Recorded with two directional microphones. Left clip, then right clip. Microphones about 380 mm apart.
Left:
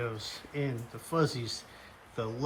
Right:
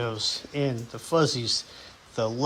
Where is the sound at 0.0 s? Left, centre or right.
Centre.